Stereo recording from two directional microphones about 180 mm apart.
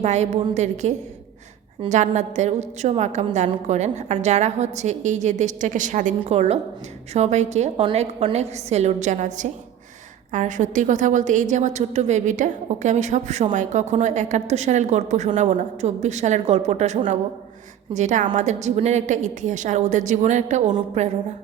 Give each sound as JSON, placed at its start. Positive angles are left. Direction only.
{"t": 0.0, "sound": "a woman's voice", "side_deg": -40}